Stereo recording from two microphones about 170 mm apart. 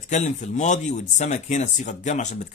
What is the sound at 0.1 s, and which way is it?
Speech, 45° left (ahead or behind).